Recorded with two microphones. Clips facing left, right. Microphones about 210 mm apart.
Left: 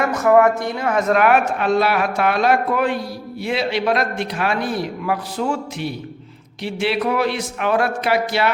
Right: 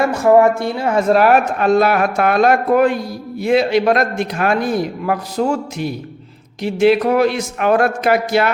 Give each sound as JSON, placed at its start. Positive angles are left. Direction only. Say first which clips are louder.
{"t": 0.0, "sound": "a man's voice", "louder": "right 3 dB", "side_deg": -30}